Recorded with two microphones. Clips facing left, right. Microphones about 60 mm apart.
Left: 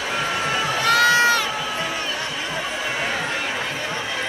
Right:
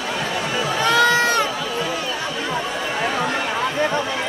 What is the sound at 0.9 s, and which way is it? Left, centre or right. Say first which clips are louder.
Crowd: even; right.